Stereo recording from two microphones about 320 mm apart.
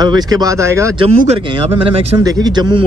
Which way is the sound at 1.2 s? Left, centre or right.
Centre.